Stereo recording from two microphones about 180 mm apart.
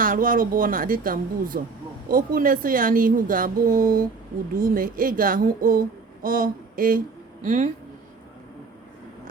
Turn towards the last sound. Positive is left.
turn(degrees=-45)  # may be behind; listen again after turning